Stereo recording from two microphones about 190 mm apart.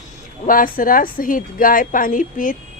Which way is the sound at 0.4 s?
45° left (ahead or behind).